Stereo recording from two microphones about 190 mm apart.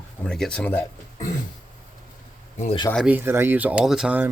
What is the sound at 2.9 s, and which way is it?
Speech, 5° right (ahead or behind).